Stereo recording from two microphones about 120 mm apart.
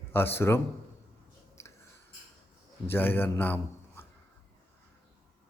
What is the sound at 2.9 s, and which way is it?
A man's voice, 15° left (ahead or behind).